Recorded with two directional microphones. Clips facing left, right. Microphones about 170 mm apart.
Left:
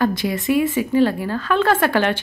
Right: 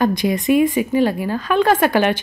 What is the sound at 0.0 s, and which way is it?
A woman's voice, 15° right (ahead or behind).